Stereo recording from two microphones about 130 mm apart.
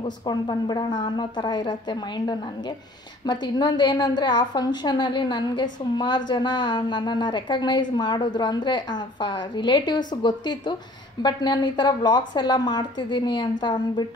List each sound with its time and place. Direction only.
0.0 s a woman's voice: 35° left (ahead or behind)